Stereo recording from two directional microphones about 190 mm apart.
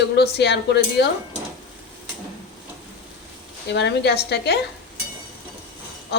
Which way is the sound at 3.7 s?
65° left (ahead or behind).